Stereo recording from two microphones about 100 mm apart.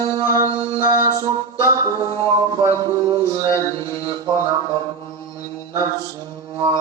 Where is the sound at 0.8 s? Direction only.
40° right (ahead or behind).